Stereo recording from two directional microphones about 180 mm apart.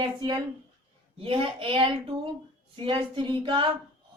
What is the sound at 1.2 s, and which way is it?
A woman's voice, 30° right (ahead or behind).